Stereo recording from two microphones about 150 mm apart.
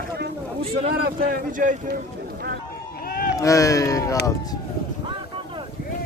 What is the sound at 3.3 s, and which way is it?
Speech, 20° left (ahead or behind).